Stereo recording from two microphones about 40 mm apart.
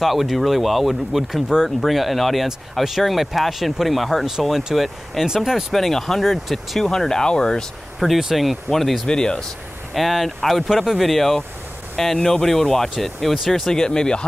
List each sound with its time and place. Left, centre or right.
0.0 s speech: centre
5.7 s speech: centre
8.0 s speech: centre
8.7 s speech: centre
9.0 s speech: centre
9.9 s speech: centre
13.7 s speech: centre